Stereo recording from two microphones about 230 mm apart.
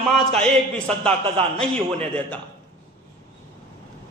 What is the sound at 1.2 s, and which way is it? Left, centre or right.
Speech, right.